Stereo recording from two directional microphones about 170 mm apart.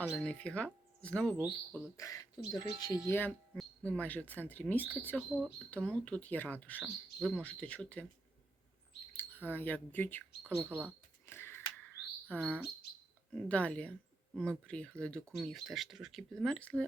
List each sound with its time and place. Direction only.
0.1 s speech: 5° left (ahead or behind)
2.0 s speech: 20° left (ahead or behind)
5.3 s speech: centre (ahead or behind)
6.8 s speech: centre (ahead or behind)
9.1 s speech: 10° left (ahead or behind)
10.7 s speech: 10° right (ahead or behind)
11.3 s a sound: 15° left (ahead or behind)
11.9 s bird: 5° left (ahead or behind)
13.3 s speech: 10° left (ahead or behind)